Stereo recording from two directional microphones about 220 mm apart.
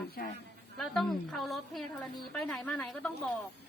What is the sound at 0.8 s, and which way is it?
A woman's voice, centre (ahead or behind).